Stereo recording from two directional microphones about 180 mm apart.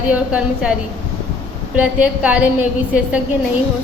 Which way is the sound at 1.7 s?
10° right (ahead or behind).